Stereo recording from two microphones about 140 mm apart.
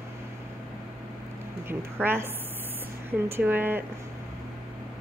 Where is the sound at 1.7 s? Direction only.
15° right (ahead or behind).